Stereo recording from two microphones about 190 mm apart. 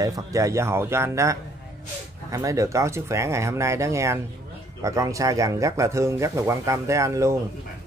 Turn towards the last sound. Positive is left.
turn(degrees=-15)  # may be behind; listen again after turning